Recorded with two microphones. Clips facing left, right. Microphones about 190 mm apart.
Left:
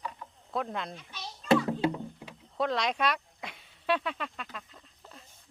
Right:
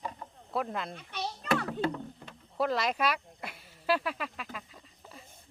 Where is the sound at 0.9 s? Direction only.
65° right (ahead or behind).